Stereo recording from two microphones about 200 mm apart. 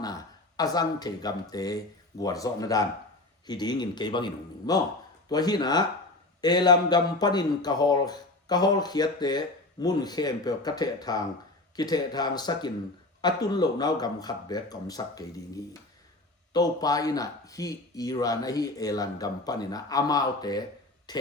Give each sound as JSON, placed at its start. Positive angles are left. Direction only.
{"t": 0.0, "sound": "a man's voice", "side_deg": 20}